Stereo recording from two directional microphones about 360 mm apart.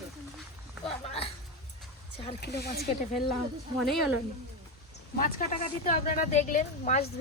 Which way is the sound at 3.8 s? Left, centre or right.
Centre.